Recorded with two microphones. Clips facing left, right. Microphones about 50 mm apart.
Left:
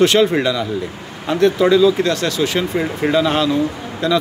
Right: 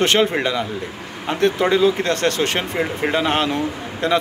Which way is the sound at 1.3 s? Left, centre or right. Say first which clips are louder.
Left 4 dB; right.